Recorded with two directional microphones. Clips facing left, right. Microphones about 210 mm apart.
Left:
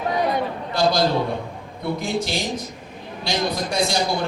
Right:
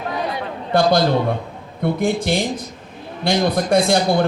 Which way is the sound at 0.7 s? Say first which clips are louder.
Right 5 dB; 55° right (ahead or behind).